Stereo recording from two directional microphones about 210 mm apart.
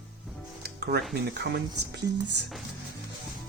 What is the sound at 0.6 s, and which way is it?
Music, 50° right (ahead or behind).